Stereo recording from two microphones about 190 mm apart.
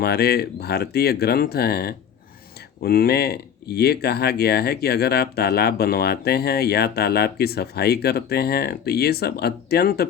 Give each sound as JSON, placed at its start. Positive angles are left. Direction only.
{"t": 0.0, "sound": "speech", "side_deg": 55}